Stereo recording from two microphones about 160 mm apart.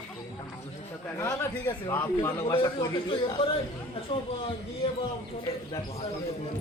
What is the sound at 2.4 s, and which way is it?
A man's voice, 25° left (ahead or behind).